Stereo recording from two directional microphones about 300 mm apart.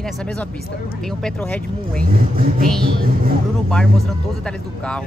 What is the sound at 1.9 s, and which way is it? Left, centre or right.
Speech, right.